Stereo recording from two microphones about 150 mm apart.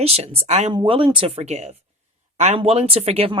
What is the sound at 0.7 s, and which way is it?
Speech, 35° right (ahead or behind).